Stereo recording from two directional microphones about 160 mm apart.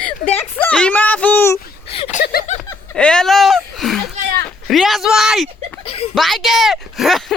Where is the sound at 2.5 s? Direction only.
50° left (ahead or behind).